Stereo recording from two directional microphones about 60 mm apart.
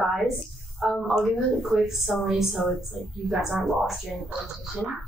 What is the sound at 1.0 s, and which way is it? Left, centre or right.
A woman's voice, centre.